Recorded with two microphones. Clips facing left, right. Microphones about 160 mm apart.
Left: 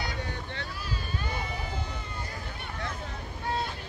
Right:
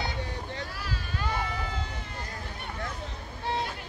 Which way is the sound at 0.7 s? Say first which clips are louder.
Even; 80° right.